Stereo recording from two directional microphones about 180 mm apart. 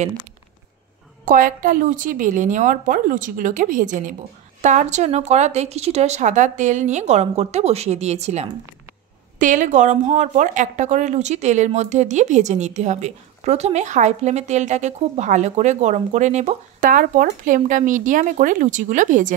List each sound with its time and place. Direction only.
1.2 s a woman's voice: 50° right (ahead or behind)